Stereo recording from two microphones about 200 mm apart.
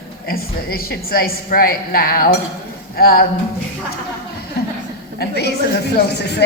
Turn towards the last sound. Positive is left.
turn(degrees=55)  # may be behind; listen again after turning